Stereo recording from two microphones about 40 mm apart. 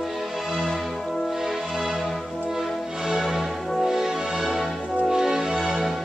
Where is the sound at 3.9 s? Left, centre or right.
Centre.